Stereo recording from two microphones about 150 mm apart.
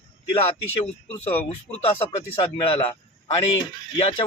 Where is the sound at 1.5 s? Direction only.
45° left (ahead or behind).